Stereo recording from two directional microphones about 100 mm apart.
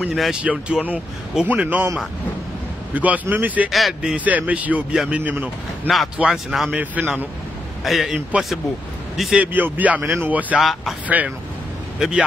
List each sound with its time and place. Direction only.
0.0 s a man's voice: 5° right (ahead or behind)
2.9 s speech: 15° right (ahead or behind)
6.1 s a man's voice: 5° right (ahead or behind)
6.7 s speech: 15° right (ahead or behind)
7.8 s a man's voice: centre (ahead or behind)
9.4 s speech: 15° right (ahead or behind)
10.6 s a man's voice: centre (ahead or behind)
11.1 s speech: 15° right (ahead or behind)